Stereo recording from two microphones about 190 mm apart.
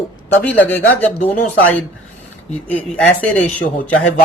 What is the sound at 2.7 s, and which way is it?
Speech, 5° left (ahead or behind).